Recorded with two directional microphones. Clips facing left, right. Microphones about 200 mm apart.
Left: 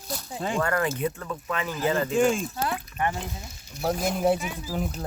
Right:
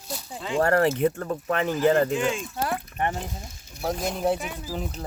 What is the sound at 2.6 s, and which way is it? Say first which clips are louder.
Speech: right 3 dB; 45° right (ahead or behind).